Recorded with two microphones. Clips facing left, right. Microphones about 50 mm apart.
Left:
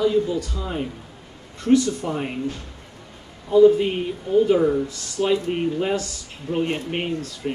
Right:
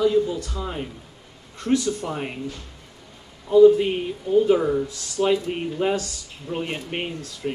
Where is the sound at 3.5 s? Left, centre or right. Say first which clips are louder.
Right 1 dB; centre.